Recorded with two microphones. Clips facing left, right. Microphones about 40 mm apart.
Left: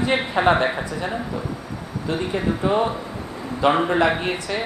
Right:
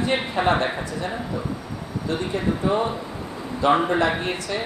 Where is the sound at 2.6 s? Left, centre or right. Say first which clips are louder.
Left 2 dB; left.